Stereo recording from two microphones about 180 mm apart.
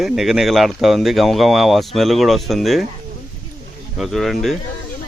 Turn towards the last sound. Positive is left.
turn(degrees=0)  # may be behind; listen again after turning